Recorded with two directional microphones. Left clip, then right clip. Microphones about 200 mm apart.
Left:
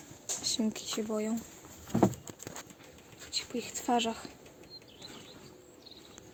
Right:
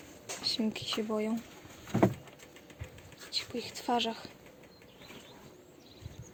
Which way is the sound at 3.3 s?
5° left (ahead or behind).